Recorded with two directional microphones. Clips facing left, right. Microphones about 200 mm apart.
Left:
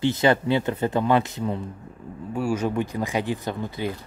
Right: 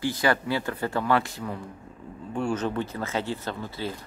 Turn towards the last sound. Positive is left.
turn(degrees=15)  # may be behind; listen again after turning